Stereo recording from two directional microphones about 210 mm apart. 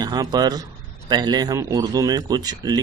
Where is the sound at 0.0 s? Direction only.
20° right (ahead or behind).